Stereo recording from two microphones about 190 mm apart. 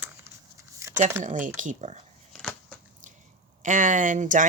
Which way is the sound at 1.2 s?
40° right (ahead or behind).